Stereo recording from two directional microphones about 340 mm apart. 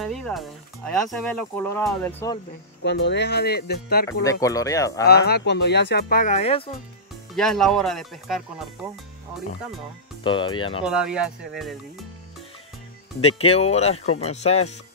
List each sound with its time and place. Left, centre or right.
0.0 s speech: centre
2.8 s speech: left
4.2 s speech: centre
5.0 s speech: left
7.3 s speech: centre
10.2 s speech: centre
10.8 s speech: centre
13.4 s speech: centre